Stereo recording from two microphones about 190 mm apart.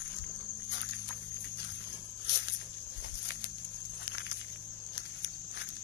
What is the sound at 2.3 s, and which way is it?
Snake, 70° left (ahead or behind).